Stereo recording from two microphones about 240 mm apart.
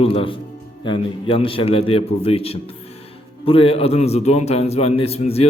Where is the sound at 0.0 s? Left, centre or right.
Left.